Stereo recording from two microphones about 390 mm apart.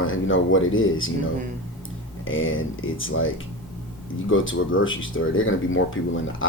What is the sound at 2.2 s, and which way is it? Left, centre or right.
Speech, left.